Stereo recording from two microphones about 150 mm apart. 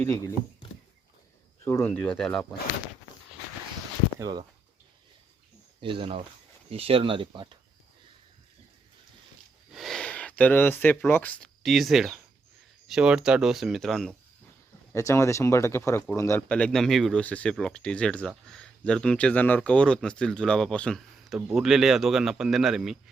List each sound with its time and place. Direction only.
0.0 s speech: 15° left (ahead or behind)
1.6 s speech: 15° left (ahead or behind)
4.2 s speech: 30° right (ahead or behind)
5.8 s speech: 35° right (ahead or behind)
9.7 s speech: centre (ahead or behind)
14.9 s speech: 20° left (ahead or behind)
16.5 s speech: 5° left (ahead or behind)